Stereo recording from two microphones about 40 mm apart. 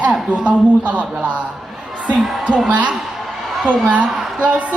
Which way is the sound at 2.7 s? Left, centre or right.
Right.